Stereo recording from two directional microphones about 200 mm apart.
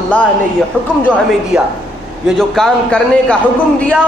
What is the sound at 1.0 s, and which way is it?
A woman's voice, 10° right (ahead or behind).